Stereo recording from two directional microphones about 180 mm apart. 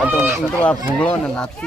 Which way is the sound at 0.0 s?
10° right (ahead or behind).